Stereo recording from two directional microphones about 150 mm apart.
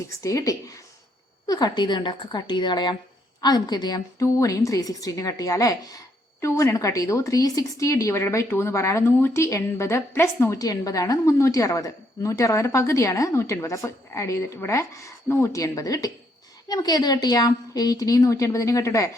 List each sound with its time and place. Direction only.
0.2 s a woman's voice: 20° left (ahead or behind)